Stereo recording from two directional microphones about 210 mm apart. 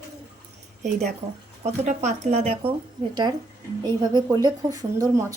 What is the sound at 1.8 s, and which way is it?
Speech, 35° right (ahead or behind).